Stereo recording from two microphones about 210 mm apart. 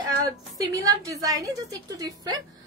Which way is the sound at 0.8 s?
15° right (ahead or behind).